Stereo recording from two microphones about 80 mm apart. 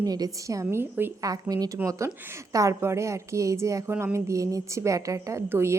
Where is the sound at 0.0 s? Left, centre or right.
Right.